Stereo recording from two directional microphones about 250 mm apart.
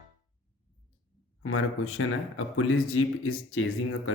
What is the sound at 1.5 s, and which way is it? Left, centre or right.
Speech, left.